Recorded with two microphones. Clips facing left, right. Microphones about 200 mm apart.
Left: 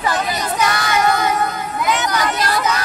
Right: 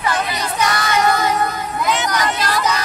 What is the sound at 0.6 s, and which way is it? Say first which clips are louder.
Child singing: right 1 dB; centre (ahead or behind).